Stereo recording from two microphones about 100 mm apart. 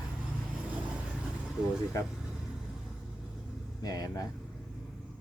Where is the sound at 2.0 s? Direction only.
35° left (ahead or behind).